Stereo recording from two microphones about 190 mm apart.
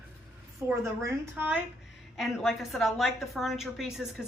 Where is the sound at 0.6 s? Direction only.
10° right (ahead or behind).